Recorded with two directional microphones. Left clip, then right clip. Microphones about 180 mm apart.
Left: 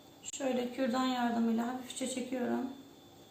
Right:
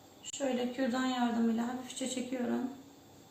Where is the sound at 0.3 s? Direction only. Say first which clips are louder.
Even; 15° left (ahead or behind).